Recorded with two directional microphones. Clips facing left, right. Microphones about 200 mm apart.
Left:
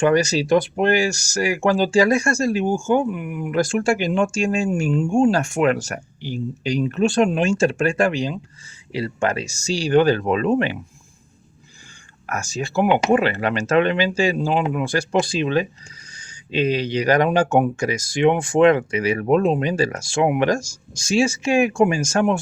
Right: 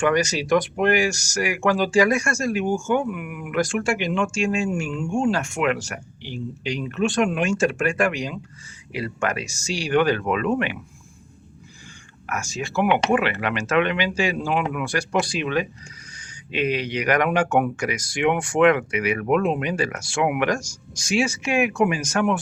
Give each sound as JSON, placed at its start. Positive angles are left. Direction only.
{"t": 0.0, "sound": "speech", "side_deg": 30}
{"t": 12.2, "sound": "speech", "side_deg": 40}